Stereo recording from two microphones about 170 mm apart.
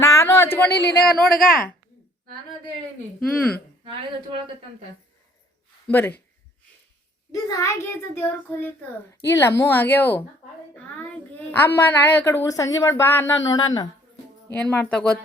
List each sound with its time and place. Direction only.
0.0 s a sound: 15° left (ahead or behind)
0.9 s a woman's voice: 5° left (ahead or behind)
3.2 s a woman's voice: 5° left (ahead or behind)
5.9 s a woman's voice: 10° left (ahead or behind)
7.4 s a woman's voice: 20° left (ahead or behind)
14.6 s a woman's voice: 5° left (ahead or behind)